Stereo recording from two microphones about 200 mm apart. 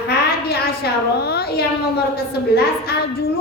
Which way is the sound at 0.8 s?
55° left (ahead or behind).